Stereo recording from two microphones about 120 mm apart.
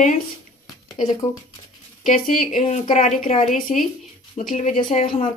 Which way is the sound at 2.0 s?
85° left.